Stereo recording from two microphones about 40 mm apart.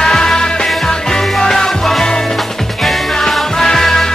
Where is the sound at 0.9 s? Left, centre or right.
Centre.